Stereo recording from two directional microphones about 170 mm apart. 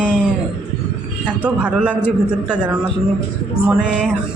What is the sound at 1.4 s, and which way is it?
A man's voice, 10° right (ahead or behind).